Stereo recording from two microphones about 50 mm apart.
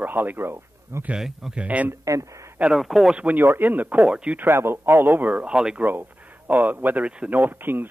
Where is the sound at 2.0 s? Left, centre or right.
Right.